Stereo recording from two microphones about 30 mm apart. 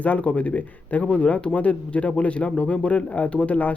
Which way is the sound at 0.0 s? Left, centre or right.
Left.